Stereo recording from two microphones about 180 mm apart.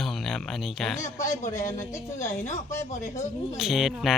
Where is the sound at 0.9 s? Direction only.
15° left (ahead or behind).